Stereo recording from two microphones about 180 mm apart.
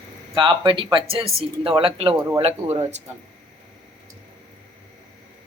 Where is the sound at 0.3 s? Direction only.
30° right (ahead or behind).